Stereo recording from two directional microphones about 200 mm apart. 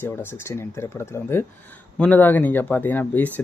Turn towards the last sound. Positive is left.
turn(degrees=10)  # may be behind; listen again after turning